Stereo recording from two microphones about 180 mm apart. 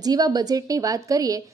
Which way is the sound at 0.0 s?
20° right (ahead or behind).